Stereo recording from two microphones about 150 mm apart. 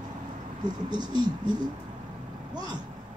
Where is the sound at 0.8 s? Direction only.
30° right (ahead or behind).